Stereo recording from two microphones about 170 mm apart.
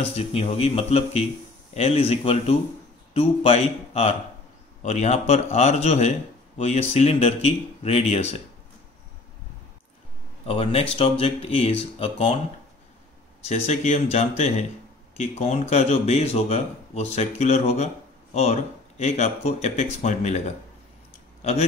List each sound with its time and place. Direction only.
0.0 s speech: 35° left (ahead or behind)
10.4 s speech: 35° left (ahead or behind)
13.5 s a man's voice: 40° left (ahead or behind)